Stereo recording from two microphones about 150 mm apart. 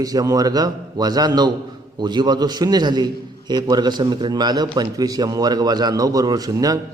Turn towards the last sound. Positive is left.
turn(degrees=-25)  # may be behind; listen again after turning